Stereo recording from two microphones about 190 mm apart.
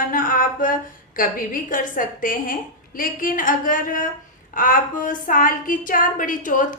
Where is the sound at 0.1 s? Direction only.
45° left (ahead or behind).